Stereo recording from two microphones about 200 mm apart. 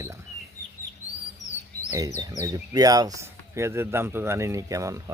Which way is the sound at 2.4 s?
20° right (ahead or behind).